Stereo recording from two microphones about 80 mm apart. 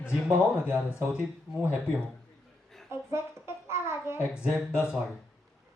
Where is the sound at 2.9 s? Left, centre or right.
Right.